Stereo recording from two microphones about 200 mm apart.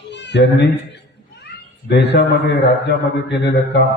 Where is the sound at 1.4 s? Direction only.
55° left (ahead or behind).